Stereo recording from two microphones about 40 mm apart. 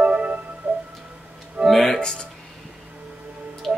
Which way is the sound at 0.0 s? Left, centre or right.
Right.